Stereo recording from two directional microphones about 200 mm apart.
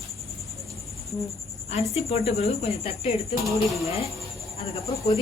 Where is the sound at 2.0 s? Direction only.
30° left (ahead or behind).